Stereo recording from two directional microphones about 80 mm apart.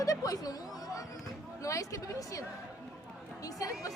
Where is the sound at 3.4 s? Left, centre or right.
Left.